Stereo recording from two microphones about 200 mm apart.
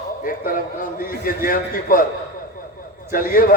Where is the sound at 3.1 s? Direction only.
45° left (ahead or behind).